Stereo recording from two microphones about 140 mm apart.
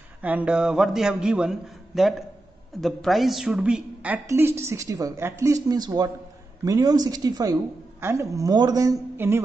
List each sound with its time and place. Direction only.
0.2 s a man's voice: 10° right (ahead or behind)